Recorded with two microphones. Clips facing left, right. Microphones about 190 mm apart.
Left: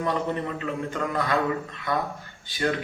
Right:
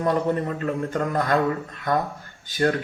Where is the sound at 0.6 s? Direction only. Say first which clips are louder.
Right 4 dB; 45° right (ahead or behind).